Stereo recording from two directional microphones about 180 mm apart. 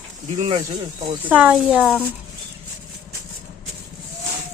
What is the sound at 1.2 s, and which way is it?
Speech, 10° right (ahead or behind).